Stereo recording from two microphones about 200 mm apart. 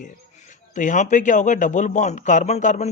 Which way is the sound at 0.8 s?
40° left (ahead or behind).